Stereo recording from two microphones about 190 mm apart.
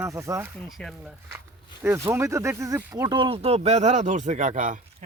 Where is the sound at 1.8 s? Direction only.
15° right (ahead or behind); by 5.0 s 40° right (ahead or behind).